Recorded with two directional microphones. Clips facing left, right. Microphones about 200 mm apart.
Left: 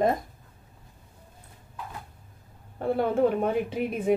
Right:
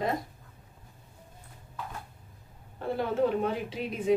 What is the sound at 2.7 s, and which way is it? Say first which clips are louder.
A woman's voice: left 4 dB; 55° left (ahead or behind).